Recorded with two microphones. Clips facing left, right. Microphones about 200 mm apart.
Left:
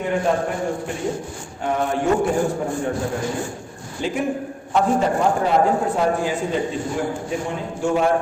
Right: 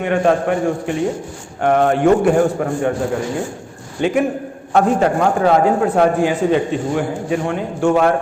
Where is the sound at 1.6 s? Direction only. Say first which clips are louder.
Right 7 dB; 70° right (ahead or behind).